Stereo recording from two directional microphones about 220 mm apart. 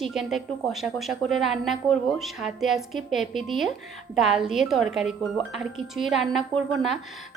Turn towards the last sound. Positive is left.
turn(degrees=0)  # may be behind; listen again after turning